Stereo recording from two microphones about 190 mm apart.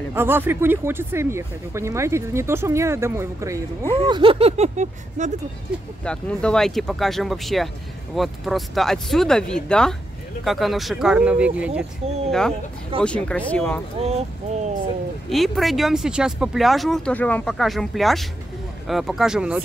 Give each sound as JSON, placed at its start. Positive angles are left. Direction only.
{"t": 0.1, "sound": "speech", "side_deg": -10}
{"t": 6.0, "sound": "speech", "side_deg": 5}
{"t": 13.9, "sound": "speech", "side_deg": -35}
{"t": 15.2, "sound": "speech", "side_deg": 0}